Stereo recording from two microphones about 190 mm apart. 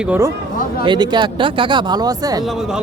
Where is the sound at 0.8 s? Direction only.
25° right (ahead or behind).